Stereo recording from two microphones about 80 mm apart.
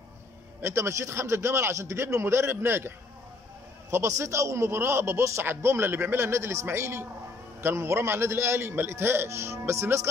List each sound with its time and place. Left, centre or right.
0.6 s a man's voice: right
3.9 s a man's voice: right